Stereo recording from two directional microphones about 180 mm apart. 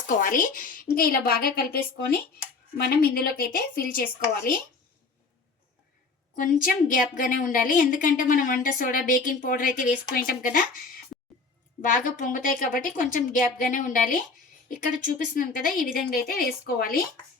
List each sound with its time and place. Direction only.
0.2 s a woman's voice: 50° left (ahead or behind)
3.2 s a woman's voice: 55° left (ahead or behind)
6.3 s a woman's voice: 45° left (ahead or behind)
11.8 s a woman's voice: 50° left (ahead or behind)